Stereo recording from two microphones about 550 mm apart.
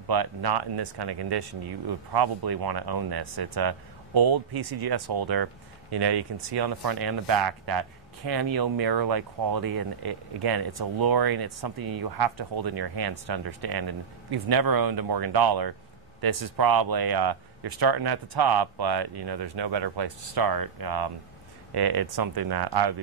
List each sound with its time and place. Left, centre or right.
0.1 s speech: right